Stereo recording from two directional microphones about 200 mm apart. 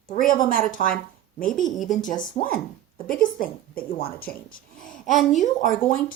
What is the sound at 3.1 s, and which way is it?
Speech, 45° left (ahead or behind).